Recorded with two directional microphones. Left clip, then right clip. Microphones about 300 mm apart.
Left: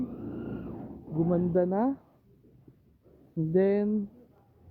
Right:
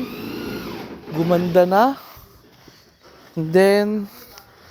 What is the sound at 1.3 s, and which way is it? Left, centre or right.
Speech, centre.